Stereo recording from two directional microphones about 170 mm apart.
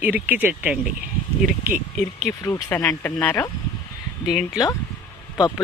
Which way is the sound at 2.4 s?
15° left (ahead or behind).